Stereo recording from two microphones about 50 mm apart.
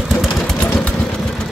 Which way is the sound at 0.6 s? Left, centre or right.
Left.